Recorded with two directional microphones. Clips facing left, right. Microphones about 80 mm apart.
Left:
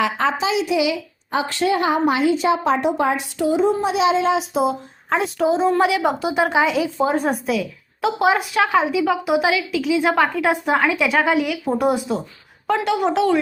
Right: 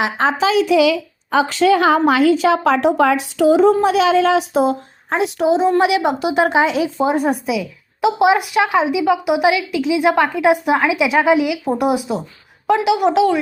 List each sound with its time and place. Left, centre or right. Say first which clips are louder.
0.2 s a woman's voice: right 4 dB; right
1.3 s a woman's voice: right 6 dB; right
4.4 s speech: right 4 dB; right
5.1 s a woman's voice: right 3 dB; centre
7.0 s a woman's voice: right 3 dB; centre